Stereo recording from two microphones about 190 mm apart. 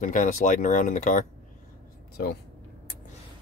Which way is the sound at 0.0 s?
45° left (ahead or behind).